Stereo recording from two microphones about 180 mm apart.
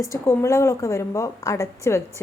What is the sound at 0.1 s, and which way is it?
Speech, 15° left (ahead or behind).